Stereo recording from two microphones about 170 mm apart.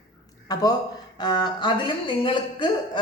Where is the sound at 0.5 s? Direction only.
20° left (ahead or behind).